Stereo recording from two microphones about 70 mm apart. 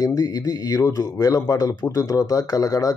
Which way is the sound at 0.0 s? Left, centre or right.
Left.